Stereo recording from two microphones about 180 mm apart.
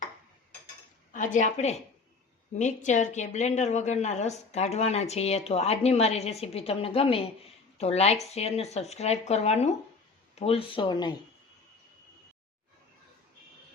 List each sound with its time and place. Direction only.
1.1 s a woman's voice: 45° left (ahead or behind); by 11.2 s 25° left (ahead or behind)